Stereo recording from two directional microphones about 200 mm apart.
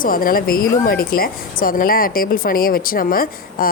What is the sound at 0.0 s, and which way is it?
Speech, 45° left (ahead or behind).